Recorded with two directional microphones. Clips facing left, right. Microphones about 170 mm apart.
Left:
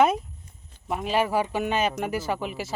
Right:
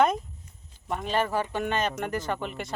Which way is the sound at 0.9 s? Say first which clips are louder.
Left 3 dB; 5° left (ahead or behind).